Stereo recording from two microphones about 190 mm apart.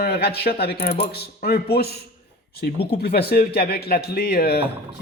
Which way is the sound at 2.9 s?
55° left (ahead or behind).